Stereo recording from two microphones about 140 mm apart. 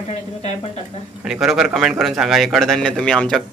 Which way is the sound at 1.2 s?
5° right (ahead or behind).